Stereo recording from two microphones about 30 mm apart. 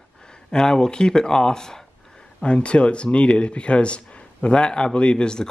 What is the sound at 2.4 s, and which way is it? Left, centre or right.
Speech, left.